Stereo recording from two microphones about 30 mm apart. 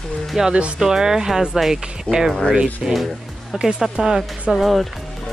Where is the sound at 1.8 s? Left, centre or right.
Right.